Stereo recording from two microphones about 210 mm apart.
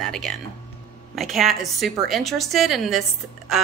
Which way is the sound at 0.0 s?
Centre (ahead or behind).